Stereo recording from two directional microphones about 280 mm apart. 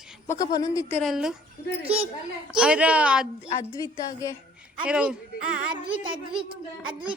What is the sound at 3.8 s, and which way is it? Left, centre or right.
Speech, centre.